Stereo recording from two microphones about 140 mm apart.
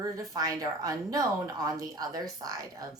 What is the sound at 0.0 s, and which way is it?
A woman's voice, 25° right (ahead or behind).